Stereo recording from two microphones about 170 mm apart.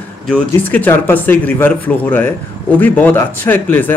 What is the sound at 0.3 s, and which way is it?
Speech, 10° left (ahead or behind).